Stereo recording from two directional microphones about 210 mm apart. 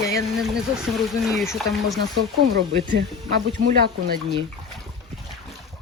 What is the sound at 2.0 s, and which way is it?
Speech, 55° right (ahead or behind).